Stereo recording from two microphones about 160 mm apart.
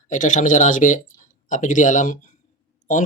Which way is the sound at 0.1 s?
50° left (ahead or behind).